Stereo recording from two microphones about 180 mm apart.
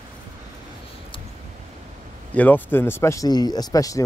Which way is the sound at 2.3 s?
10° left (ahead or behind).